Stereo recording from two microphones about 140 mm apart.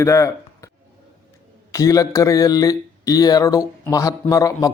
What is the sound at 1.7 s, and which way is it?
A man's voice, 25° left (ahead or behind).